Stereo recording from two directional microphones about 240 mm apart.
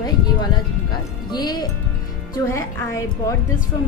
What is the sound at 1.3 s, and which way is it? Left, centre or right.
A woman's voice, centre.